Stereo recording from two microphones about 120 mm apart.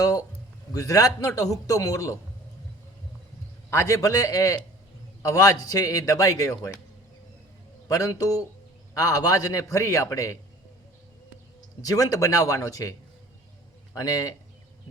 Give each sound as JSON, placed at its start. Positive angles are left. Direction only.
{"t": 0.7, "sound": "a man's voice", "side_deg": 30}
{"t": 3.7, "sound": "a man's voice", "side_deg": 25}
{"t": 7.9, "sound": "a man's voice", "side_deg": 30}
{"t": 11.8, "sound": "a man's voice", "side_deg": 30}
{"t": 13.9, "sound": "a man's voice", "side_deg": 30}